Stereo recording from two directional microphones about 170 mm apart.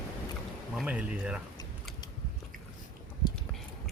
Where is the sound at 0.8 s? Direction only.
5° right (ahead or behind).